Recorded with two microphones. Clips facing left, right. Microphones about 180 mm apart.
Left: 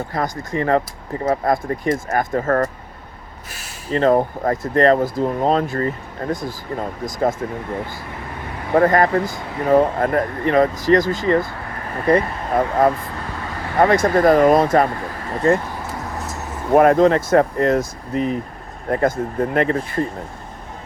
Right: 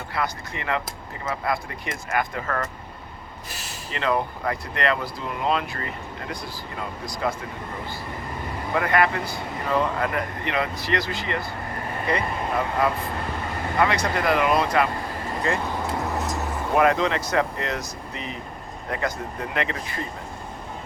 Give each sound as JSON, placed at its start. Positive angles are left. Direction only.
{"t": 0.1, "sound": "speech", "side_deg": 45}
{"t": 3.9, "sound": "speech", "side_deg": 45}
{"t": 8.7, "sound": "speech", "side_deg": 40}
{"t": 16.7, "sound": "speech", "side_deg": 50}